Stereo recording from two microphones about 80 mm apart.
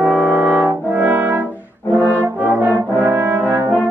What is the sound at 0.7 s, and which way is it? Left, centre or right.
Brass instrument, right.